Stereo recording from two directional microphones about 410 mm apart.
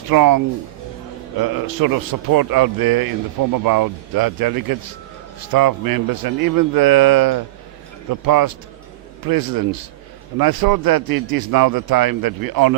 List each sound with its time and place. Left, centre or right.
0.1 s a man's voice: right